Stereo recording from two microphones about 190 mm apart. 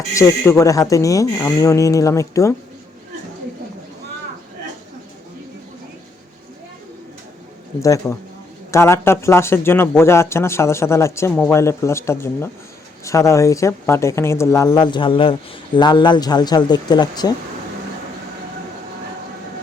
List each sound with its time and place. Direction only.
0.1 s speech: 15° left (ahead or behind)
7.8 s speech: 15° left (ahead or behind)